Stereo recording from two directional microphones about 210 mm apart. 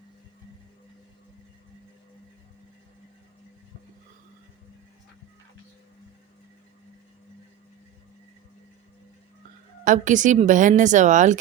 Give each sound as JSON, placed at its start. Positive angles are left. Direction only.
{"t": 9.8, "sound": "a woman's voice", "side_deg": -35}